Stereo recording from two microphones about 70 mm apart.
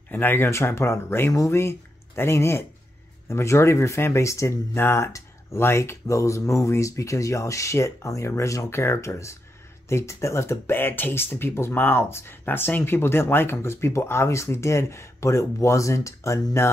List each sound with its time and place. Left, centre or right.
0.1 s speech: left